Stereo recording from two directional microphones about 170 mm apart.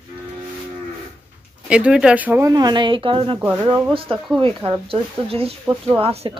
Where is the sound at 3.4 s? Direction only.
10° right (ahead or behind).